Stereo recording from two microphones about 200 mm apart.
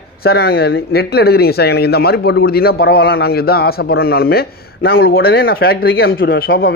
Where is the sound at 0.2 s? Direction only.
50° left (ahead or behind).